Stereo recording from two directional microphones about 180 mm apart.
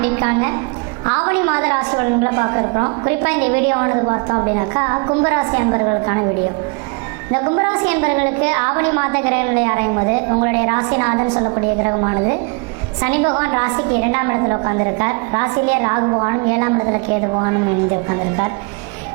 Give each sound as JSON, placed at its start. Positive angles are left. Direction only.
{"t": 0.0, "sound": "a woman's voice", "side_deg": -20}
{"t": 7.3, "sound": "a woman's voice", "side_deg": -20}
{"t": 18.1, "sound": "a woman's voice", "side_deg": -20}